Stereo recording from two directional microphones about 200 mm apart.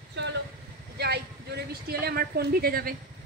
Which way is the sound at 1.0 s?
55° right (ahead or behind).